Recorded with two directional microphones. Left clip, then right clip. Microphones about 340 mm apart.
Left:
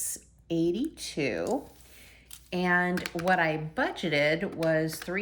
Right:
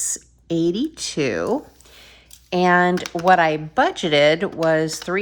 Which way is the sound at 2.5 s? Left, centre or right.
Centre.